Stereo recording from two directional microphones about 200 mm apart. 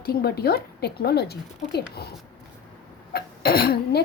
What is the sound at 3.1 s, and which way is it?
Cough, 50° left (ahead or behind).